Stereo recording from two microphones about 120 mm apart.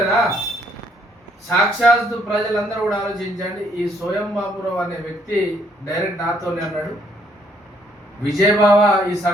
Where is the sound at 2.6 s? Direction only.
30° left (ahead or behind).